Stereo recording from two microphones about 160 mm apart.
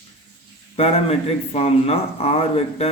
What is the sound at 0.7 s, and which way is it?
A man's voice, 40° left (ahead or behind).